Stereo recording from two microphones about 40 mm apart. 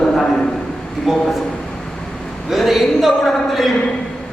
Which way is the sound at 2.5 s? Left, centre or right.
Centre.